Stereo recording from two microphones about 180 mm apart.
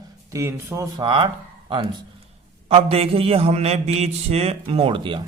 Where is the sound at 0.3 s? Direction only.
15° right (ahead or behind).